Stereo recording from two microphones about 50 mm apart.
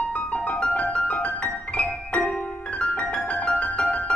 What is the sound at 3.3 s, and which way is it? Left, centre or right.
Music, left.